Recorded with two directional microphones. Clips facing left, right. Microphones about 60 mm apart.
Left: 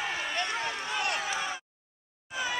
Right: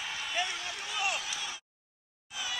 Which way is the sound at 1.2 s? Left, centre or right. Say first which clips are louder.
Left 7 dB; left.